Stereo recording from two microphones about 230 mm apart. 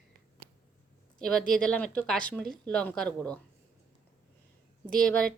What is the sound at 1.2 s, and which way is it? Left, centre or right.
A woman's voice, centre.